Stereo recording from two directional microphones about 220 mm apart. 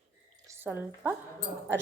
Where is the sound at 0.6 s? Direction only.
10° right (ahead or behind).